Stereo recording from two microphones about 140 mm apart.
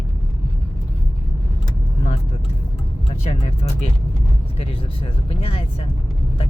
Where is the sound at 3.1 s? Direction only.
45° left (ahead or behind).